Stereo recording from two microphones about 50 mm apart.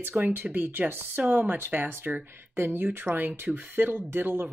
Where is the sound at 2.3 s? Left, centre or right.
Right.